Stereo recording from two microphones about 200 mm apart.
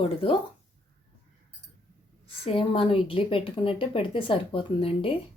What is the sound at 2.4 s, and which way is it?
Speech, 30° left (ahead or behind).